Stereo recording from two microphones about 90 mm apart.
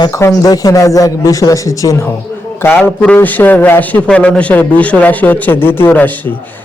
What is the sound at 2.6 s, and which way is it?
A man's voice, 25° left (ahead or behind).